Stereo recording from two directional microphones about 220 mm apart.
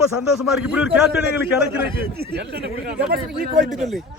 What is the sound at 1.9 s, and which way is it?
Speech, 45° right (ahead or behind).